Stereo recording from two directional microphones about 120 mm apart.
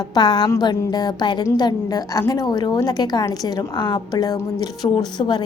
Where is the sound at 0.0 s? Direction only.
35° left (ahead or behind).